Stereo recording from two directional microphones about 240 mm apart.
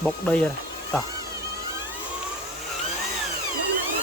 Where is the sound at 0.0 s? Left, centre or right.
Centre.